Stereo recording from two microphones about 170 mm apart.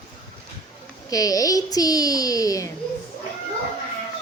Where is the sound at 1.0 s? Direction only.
20° left (ahead or behind).